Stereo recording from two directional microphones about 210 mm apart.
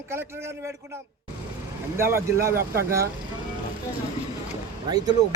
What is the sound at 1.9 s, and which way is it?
Speech, 10° right (ahead or behind).